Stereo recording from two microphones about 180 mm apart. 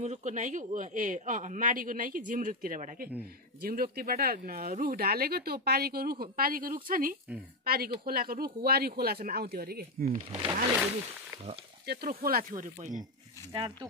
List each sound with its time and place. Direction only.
0.0 s a woman's voice: 40° right (ahead or behind); by 10.2 s 55° right (ahead or behind)
11.8 s a woman's voice: 60° right (ahead or behind)
13.5 s speech: 25° right (ahead or behind)